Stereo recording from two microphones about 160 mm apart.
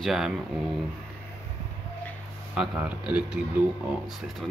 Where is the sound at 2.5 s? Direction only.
10° right (ahead or behind).